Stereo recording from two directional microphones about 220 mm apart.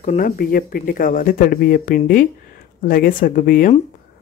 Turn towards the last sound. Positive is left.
turn(degrees=40)  # may be behind; listen again after turning